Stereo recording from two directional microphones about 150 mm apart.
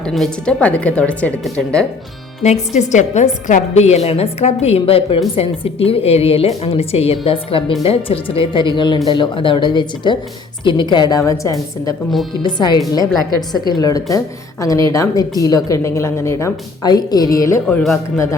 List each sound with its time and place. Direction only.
0.0 s speech: 5° left (ahead or behind)
2.4 s a woman's voice: 50° left (ahead or behind); by 17.6 s 25° left (ahead or behind)
17.7 s speech: 5° left (ahead or behind)